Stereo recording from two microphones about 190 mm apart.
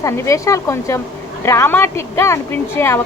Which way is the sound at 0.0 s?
15° left (ahead or behind).